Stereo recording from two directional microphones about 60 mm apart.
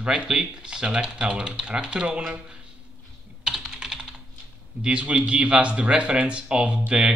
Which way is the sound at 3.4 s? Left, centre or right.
Centre.